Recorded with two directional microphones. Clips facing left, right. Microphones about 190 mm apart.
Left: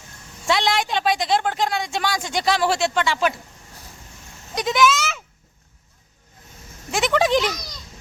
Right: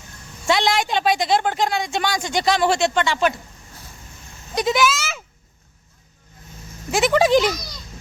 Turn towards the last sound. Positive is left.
turn(degrees=-5)  # may be behind; listen again after turning